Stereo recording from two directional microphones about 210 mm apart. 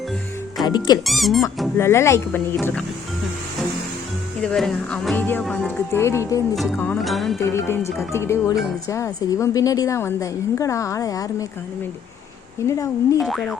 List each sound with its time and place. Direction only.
1.0 s speech: centre (ahead or behind)
1.8 s a woman's voice: 15° left (ahead or behind)
4.4 s speech: centre (ahead or behind)
5.9 s a woman's voice: 10° left (ahead or behind)
7.3 s a woman's voice: 15° left (ahead or behind)
12.6 s a woman's voice: 15° left (ahead or behind)
13.2 s speech: centre (ahead or behind)